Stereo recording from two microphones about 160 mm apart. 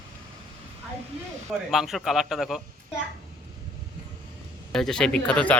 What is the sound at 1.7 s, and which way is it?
Speech, centre (ahead or behind).